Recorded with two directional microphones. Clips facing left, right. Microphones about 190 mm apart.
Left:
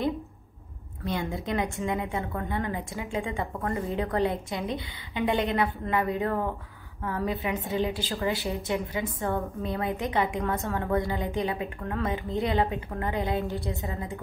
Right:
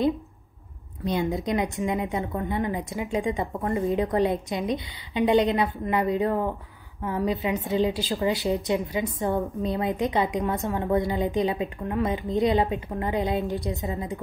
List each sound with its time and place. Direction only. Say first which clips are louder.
1.0 s a woman's voice: right 5 dB; 20° right (ahead or behind)